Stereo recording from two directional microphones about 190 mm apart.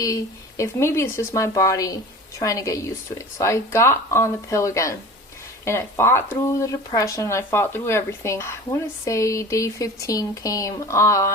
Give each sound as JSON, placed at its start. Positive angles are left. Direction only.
{"t": 0.0, "sound": "speech", "side_deg": 15}